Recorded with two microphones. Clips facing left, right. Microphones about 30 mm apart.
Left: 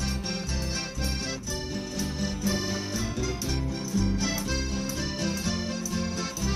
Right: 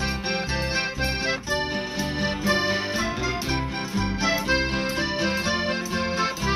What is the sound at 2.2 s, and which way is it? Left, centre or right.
Music, right.